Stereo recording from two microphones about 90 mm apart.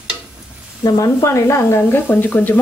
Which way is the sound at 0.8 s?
40° left (ahead or behind).